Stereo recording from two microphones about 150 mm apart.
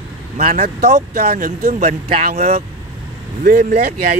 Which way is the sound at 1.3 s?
70° right (ahead or behind).